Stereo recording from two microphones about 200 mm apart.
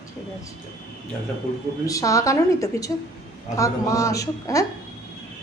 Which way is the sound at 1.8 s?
15° left (ahead or behind).